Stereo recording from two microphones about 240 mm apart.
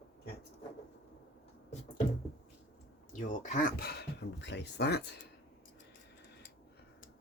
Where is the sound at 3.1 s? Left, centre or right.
Left.